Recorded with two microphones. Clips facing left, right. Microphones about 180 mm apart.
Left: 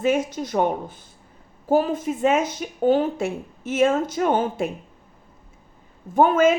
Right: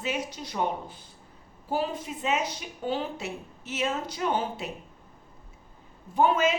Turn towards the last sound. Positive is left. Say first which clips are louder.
# left 7 dB
turn(degrees=50)  # may be behind; listen again after turning